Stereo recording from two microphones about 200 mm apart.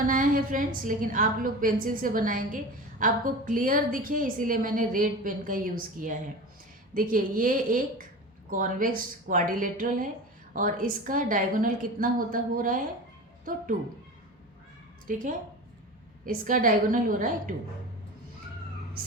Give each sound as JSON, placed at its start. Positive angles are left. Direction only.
{"t": 0.1, "sound": "a woman's voice", "side_deg": -40}
{"t": 15.0, "sound": "a woman's voice", "side_deg": -40}